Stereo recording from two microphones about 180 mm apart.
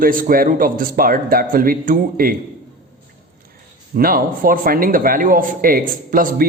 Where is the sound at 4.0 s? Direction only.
55° right (ahead or behind).